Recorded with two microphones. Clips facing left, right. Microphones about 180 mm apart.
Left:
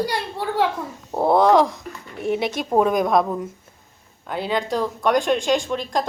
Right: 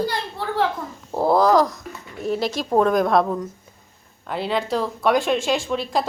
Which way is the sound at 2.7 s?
5° left (ahead or behind).